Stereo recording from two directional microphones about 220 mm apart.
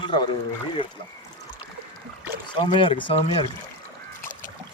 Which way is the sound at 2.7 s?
25° left (ahead or behind).